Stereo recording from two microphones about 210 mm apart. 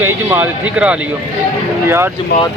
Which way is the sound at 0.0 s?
10° right (ahead or behind).